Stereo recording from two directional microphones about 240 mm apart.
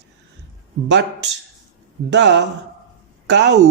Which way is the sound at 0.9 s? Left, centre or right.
Right.